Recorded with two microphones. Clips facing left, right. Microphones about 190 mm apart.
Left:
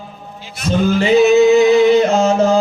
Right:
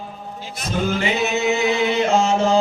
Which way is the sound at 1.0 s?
35° left (ahead or behind).